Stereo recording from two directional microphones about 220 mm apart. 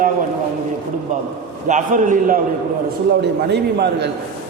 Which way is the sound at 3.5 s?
50° right (ahead or behind).